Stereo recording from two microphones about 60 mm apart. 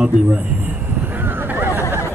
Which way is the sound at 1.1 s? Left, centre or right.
Right.